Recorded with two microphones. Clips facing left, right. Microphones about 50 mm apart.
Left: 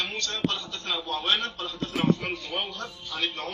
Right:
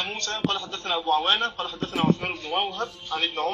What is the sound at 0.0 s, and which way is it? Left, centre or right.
A man's voice, right.